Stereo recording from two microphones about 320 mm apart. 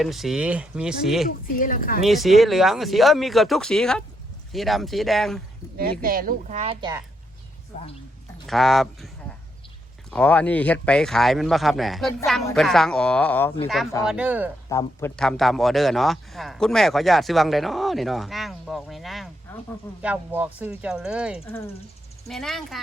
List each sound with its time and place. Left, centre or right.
0.0 s a man's voice: centre
1.5 s a woman's voice: left
2.0 s a man's voice: centre
5.7 s speech: right
7.7 s a woman's voice: left
8.4 s a man's voice: centre
10.1 s a man's voice: centre
14.7 s a man's voice: centre
20.0 s a man's voice: centre